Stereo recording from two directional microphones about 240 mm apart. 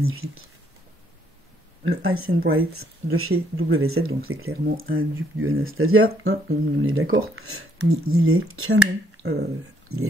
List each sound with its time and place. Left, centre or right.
0.0 s speech: right
2.0 s speech: right
9.2 s speech: right
9.9 s speech: right